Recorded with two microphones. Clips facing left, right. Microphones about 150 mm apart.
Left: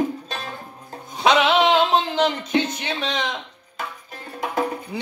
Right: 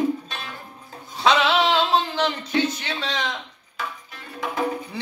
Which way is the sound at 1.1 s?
15° left (ahead or behind).